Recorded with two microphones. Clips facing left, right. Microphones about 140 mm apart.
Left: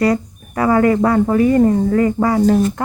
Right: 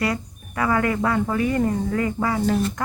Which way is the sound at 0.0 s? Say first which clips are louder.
Left 9 dB; 40° left (ahead or behind).